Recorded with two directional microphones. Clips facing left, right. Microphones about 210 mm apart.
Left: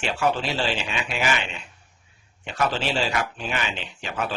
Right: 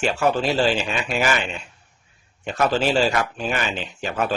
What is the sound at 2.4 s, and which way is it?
Speech, 45° right (ahead or behind).